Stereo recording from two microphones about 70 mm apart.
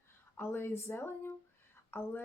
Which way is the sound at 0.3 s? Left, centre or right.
Left.